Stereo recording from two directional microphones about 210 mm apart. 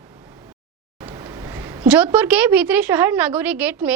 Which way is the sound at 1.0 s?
15° right (ahead or behind).